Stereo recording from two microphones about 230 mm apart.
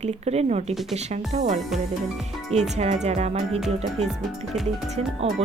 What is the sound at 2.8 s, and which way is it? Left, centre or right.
Speech, right.